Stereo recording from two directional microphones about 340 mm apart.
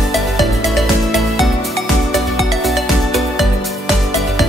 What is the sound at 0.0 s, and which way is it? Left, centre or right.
Music, centre.